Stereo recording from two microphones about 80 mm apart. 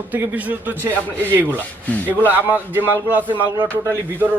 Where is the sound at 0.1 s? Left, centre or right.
Right.